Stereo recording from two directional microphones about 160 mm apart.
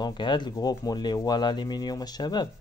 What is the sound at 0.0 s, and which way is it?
Speech, 30° left (ahead or behind).